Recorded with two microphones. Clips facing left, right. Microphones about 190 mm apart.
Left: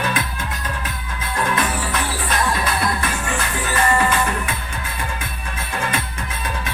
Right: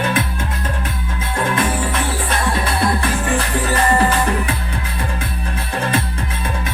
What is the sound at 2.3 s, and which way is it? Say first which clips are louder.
Music: right 1 dB; 30° right (ahead or behind).